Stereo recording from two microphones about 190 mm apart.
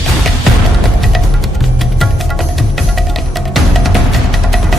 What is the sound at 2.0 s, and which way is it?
Music, centre (ahead or behind).